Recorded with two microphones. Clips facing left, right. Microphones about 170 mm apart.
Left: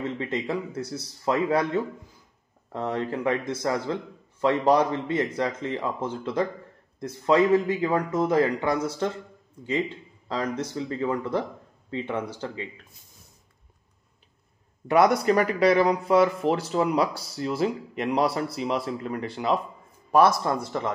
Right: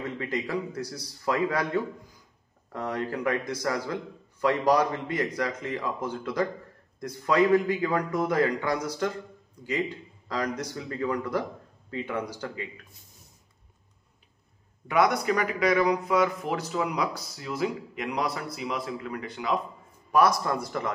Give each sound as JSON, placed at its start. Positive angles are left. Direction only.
{"t": 0.0, "sound": "a man's voice", "side_deg": 25}
{"t": 14.9, "sound": "a man's voice", "side_deg": 30}